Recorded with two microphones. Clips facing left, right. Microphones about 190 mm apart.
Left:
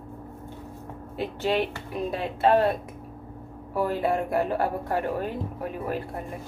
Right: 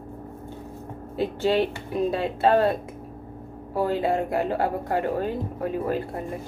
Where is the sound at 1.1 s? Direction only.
30° right (ahead or behind).